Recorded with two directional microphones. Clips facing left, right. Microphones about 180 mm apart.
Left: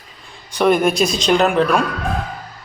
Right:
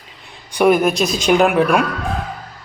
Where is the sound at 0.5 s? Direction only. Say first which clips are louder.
Right 1 dB; 10° right (ahead or behind).